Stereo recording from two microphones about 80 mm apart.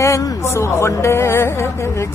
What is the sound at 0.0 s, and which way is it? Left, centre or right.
A woman's voice, left.